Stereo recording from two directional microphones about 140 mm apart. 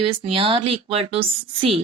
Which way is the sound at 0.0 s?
40° right (ahead or behind).